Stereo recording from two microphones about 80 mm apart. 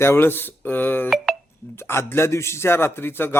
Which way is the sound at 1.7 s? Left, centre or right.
Left.